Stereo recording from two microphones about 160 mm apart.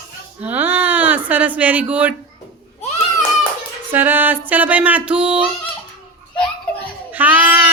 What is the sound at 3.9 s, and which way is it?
Speech, 10° right (ahead or behind).